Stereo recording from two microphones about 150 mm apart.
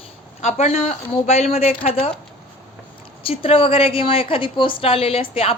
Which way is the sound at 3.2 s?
40° left (ahead or behind).